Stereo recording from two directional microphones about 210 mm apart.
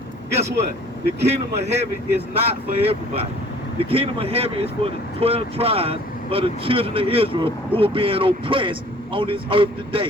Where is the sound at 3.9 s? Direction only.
25° right (ahead or behind).